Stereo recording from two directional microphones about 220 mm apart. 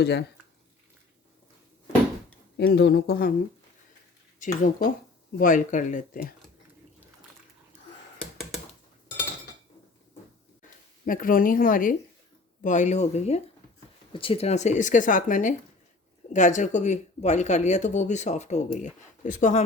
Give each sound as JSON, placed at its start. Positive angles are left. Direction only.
{"t": 0.0, "sound": "speech", "side_deg": 50}
{"t": 2.6, "sound": "speech", "side_deg": 50}
{"t": 4.4, "sound": "speech", "side_deg": 35}
{"t": 8.2, "sound": "computer keyboard", "side_deg": 0}
{"t": 11.0, "sound": "speech", "side_deg": 40}